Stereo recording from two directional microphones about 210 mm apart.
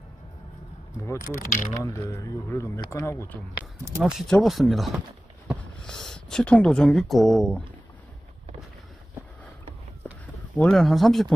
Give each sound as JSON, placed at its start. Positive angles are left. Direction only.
{"t": 1.1, "sound": "speech", "side_deg": 45}
{"t": 1.8, "sound": "speech", "side_deg": 15}
{"t": 4.0, "sound": "speech", "side_deg": 0}
{"t": 10.5, "sound": "speech", "side_deg": 5}